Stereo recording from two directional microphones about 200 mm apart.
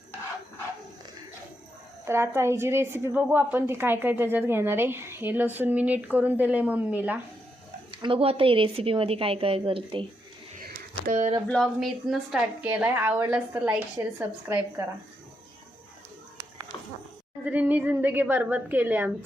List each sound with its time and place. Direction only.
2.0 s a woman's voice: 10° right (ahead or behind)
7.9 s speech: 25° right (ahead or behind)
11.0 s speech: 35° right (ahead or behind)
11.4 s a woman's voice: 5° left (ahead or behind); by 14.8 s 15° right (ahead or behind)
16.7 s a sound: 20° left (ahead or behind)
17.4 s a woman's voice: 10° right (ahead or behind)